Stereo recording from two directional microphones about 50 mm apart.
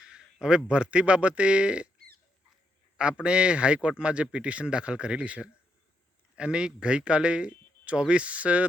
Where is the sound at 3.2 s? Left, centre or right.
Right.